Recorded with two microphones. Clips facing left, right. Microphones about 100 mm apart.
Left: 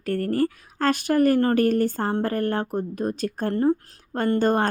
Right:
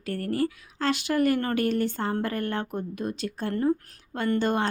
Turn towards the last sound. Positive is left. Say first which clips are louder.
# left 4 dB
turn(degrees=45)  # may be behind; listen again after turning